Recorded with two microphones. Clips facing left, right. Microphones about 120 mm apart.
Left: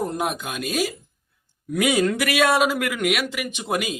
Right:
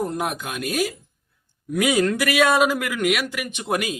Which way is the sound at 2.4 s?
Centre (ahead or behind).